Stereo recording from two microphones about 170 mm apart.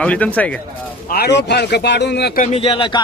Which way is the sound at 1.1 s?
80° left.